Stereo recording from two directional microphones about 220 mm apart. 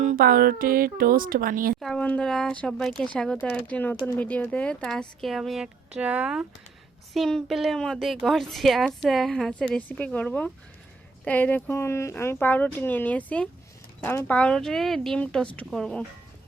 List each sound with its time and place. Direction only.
0.0 s speech: 40° right (ahead or behind)
1.8 s a woman's voice: 5° left (ahead or behind)